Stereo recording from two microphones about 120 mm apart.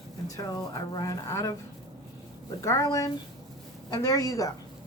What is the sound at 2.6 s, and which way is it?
Speech, 25° left (ahead or behind).